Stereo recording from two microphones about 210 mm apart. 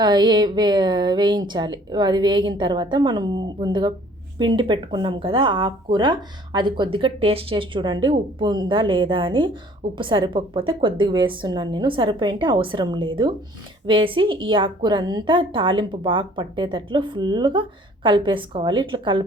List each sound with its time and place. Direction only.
0.0 s a woman's voice: 20° right (ahead or behind)